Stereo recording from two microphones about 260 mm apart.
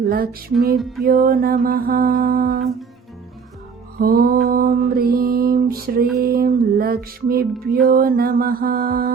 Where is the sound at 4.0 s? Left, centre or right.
Right.